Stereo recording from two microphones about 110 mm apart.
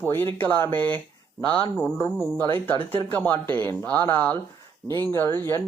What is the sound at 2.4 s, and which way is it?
Speech, 15° left (ahead or behind).